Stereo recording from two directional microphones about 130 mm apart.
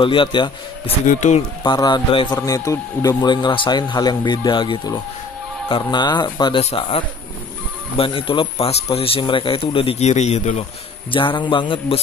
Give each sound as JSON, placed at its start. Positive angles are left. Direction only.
{"t": 0.0, "sound": "a man's voice", "side_deg": 40}
{"t": 1.0, "sound": "speech", "side_deg": 70}
{"t": 1.6, "sound": "a man's voice", "side_deg": 35}
{"t": 6.6, "sound": "speech", "side_deg": 50}
{"t": 8.0, "sound": "speech", "side_deg": 40}
{"t": 11.1, "sound": "a man's voice", "side_deg": 40}